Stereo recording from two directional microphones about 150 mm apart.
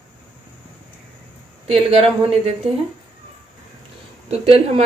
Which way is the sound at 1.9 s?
40° right (ahead or behind).